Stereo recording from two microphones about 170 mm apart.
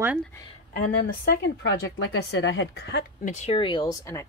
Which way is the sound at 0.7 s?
55° left (ahead or behind).